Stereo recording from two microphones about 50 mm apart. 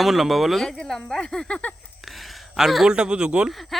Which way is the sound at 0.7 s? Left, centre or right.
Centre.